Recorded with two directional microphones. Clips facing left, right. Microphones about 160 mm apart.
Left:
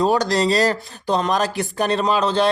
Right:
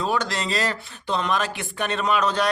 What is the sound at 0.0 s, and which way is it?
Speech, 40° left (ahead or behind).